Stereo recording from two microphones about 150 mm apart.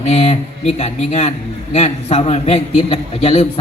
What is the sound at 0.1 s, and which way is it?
A man's voice, 45° left (ahead or behind).